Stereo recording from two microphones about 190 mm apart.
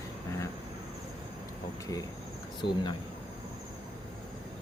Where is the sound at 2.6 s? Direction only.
25° left (ahead or behind).